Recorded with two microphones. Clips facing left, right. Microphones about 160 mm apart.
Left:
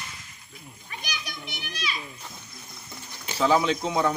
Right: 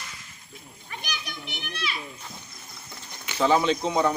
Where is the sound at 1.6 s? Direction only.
60° right (ahead or behind).